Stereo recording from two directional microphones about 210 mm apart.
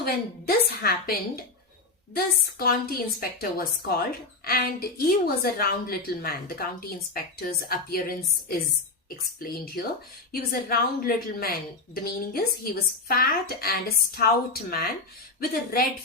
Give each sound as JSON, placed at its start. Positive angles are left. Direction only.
{"t": 0.0, "sound": "a woman's voice", "side_deg": 45}